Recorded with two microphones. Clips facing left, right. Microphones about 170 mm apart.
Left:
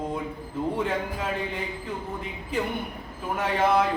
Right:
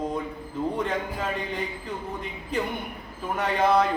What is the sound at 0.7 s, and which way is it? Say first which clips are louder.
Speech: even; 5° left (ahead or behind).